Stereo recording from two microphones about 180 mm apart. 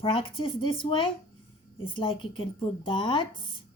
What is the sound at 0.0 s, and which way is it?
Speech, 30° left (ahead or behind).